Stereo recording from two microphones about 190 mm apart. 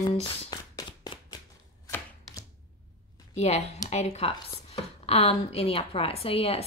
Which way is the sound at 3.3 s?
35° left (ahead or behind).